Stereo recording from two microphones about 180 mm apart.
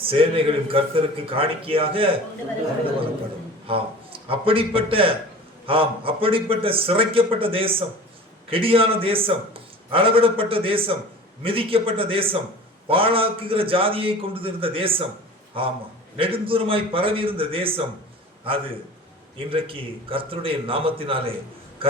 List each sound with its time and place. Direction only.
0.0 s a man's voice: 30° right (ahead or behind)
3.7 s a man's voice: 30° right (ahead or behind)
19.4 s a man's voice: 30° right (ahead or behind)
21.8 s a sound: 30° right (ahead or behind)